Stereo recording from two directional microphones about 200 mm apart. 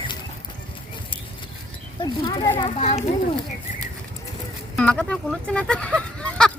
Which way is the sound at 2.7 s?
35° left (ahead or behind).